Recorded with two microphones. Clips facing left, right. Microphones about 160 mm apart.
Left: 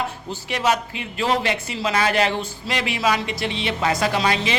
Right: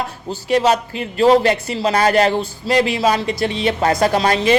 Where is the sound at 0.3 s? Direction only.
35° right (ahead or behind).